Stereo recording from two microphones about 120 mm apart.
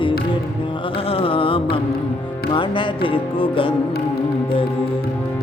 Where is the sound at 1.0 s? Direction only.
50° left (ahead or behind).